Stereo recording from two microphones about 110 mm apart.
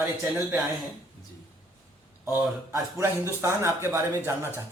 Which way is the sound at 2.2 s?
25° right (ahead or behind).